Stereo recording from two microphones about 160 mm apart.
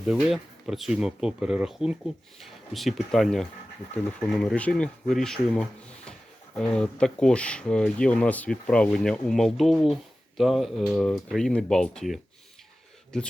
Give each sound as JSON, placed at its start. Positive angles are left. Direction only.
{"t": 0.0, "sound": "speech", "side_deg": 0}